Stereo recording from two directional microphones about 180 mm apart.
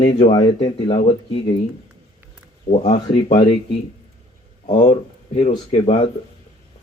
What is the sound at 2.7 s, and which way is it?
Speech, 35° left (ahead or behind).